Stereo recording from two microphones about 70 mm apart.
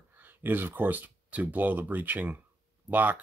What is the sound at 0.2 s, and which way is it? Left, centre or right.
Speech, right.